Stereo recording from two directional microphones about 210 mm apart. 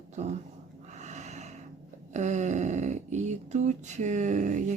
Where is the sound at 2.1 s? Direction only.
35° right (ahead or behind).